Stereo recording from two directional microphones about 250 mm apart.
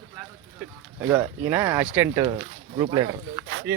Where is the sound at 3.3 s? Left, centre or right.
Right.